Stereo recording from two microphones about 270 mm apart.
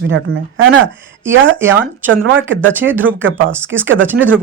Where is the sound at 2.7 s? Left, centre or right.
Centre.